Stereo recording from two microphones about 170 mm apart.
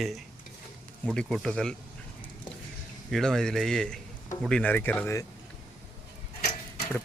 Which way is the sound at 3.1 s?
5° left (ahead or behind).